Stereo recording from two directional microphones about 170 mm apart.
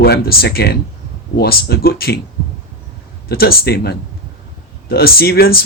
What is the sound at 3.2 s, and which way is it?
A man's voice, 65° left (ahead or behind).